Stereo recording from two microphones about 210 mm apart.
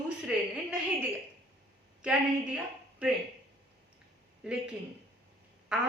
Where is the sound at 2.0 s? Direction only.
5° right (ahead or behind).